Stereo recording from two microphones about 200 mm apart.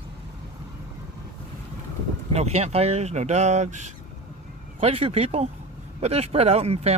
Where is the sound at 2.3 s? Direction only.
30° right (ahead or behind).